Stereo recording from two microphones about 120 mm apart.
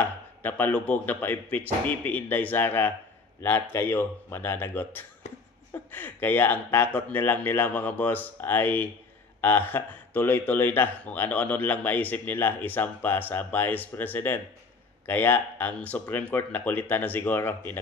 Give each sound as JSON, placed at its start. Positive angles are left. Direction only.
{"t": 0.0, "sound": "a man's voice", "side_deg": 15}